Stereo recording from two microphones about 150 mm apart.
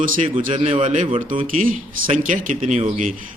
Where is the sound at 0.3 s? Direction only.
40° right (ahead or behind).